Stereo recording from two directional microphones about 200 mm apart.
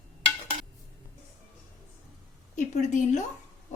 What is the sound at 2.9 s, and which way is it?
Speech, 40° left (ahead or behind).